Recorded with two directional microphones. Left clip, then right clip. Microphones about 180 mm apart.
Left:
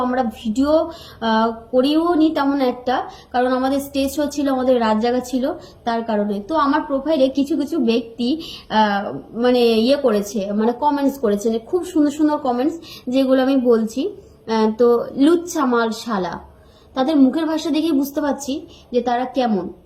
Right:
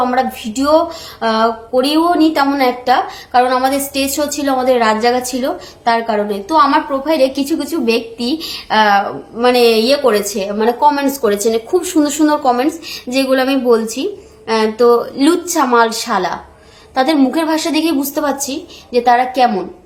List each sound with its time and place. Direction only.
0.0 s speech: 20° right (ahead or behind)